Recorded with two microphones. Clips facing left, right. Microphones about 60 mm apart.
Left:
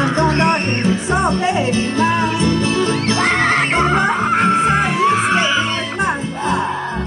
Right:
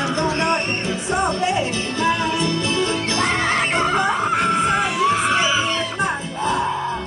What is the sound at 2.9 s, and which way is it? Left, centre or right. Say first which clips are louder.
Music: left 4 dB; left.